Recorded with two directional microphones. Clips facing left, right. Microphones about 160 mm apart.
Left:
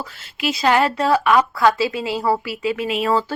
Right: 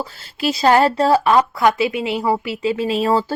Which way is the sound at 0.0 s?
35° right (ahead or behind).